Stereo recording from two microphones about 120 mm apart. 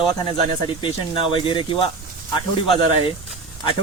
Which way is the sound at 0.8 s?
45° left (ahead or behind).